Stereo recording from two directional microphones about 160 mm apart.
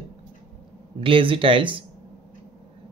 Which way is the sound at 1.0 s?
35° right (ahead or behind).